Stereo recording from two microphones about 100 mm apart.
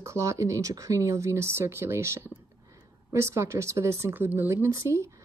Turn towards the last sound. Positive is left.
turn(degrees=-30)  # may be behind; listen again after turning